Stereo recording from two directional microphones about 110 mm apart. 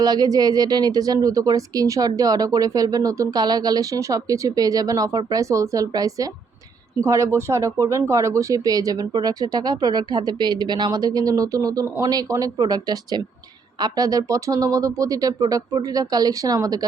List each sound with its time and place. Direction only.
0.0 s speech: 35° right (ahead or behind)